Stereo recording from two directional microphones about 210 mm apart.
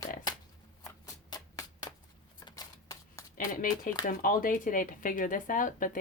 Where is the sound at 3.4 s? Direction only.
40° left (ahead or behind).